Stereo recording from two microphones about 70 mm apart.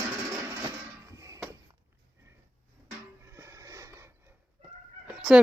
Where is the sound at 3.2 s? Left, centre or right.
Right.